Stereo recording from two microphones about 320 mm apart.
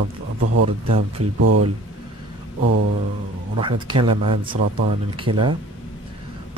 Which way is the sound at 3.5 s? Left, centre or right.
Centre.